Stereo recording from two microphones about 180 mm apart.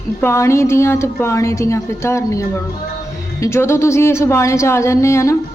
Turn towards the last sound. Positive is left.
turn(degrees=15)  # may be behind; listen again after turning